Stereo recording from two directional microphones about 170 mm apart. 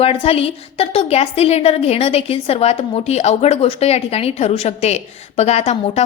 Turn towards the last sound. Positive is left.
turn(degrees=40)  # may be behind; listen again after turning